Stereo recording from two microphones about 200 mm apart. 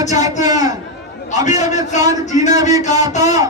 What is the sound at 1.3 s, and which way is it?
Speech, 35° left (ahead or behind).